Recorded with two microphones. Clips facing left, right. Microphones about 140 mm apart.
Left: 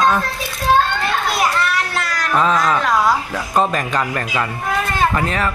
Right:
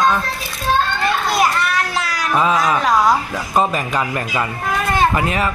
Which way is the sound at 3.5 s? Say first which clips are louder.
Even; 5° right (ahead or behind).